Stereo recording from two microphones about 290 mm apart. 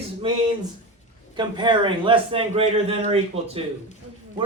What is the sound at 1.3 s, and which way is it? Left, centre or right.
A man's voice, centre.